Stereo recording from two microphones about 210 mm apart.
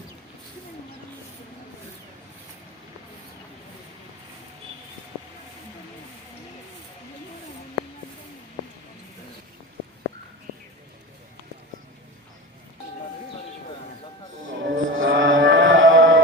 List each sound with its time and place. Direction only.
14.4 s music: 65° right (ahead or behind)